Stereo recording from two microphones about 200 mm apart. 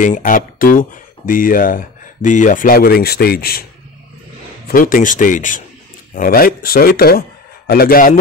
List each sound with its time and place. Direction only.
0.0 s speech: 40° left (ahead or behind)
4.6 s speech: 45° left (ahead or behind)